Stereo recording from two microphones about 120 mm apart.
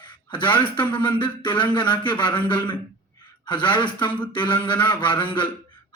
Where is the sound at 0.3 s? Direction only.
40° left (ahead or behind).